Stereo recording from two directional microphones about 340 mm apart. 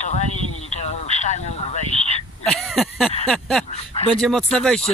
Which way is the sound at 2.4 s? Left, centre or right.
Centre.